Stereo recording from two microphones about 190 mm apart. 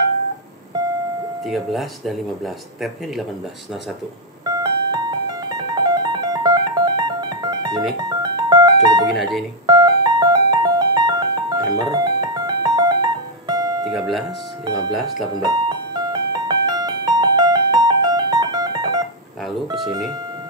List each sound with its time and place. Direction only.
1.4 s speech: centre (ahead or behind)
4.5 s music: 20° right (ahead or behind)
9.1 s speech: centre (ahead or behind)
9.7 s music: 20° right (ahead or behind)
13.8 s speech: centre (ahead or behind)
15.4 s music: 20° right (ahead or behind)
19.4 s speech: centre (ahead or behind)